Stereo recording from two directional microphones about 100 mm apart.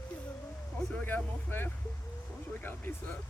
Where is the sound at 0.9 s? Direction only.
20° left (ahead or behind).